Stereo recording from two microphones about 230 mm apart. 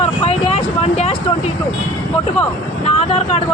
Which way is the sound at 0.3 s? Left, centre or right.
Left.